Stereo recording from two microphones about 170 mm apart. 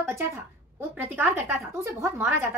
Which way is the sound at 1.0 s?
15° right (ahead or behind).